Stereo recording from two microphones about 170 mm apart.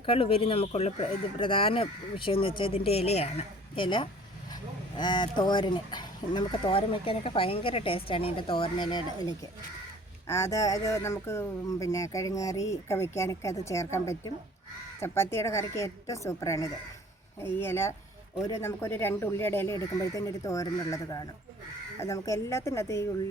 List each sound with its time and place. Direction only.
0.0 s speech: 35° left (ahead or behind)
10.2 s speech: 15° left (ahead or behind)
15.0 s speech: 15° left (ahead or behind)